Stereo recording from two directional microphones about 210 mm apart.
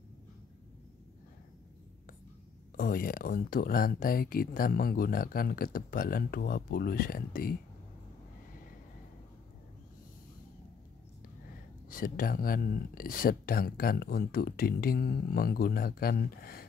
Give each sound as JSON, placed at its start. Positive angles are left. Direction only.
{"t": 2.8, "sound": "speech", "side_deg": 45}
{"t": 11.9, "sound": "speech", "side_deg": 40}